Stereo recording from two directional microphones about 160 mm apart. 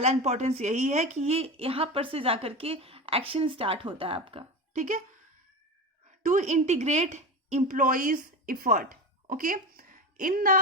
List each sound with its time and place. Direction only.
0.0 s a woman's voice: 45° right (ahead or behind)
4.8 s a woman's voice: 50° right (ahead or behind)
6.2 s a woman's voice: 50° right (ahead or behind)